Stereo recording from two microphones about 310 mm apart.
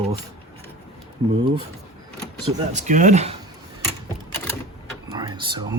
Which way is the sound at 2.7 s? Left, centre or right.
Right.